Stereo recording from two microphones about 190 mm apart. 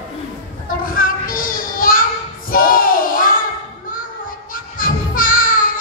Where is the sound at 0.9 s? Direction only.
50° left (ahead or behind).